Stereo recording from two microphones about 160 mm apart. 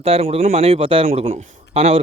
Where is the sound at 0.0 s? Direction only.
40° right (ahead or behind).